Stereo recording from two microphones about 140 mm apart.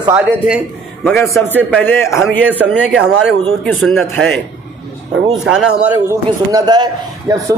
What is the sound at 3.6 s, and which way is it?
A man's voice, 5° left (ahead or behind).